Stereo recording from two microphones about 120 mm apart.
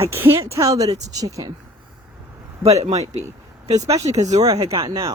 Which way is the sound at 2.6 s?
30° right (ahead or behind).